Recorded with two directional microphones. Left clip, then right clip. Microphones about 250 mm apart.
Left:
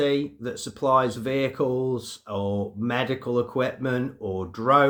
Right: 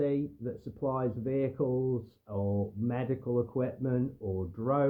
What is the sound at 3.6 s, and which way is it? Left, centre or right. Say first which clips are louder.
Speech: left 7 dB; centre.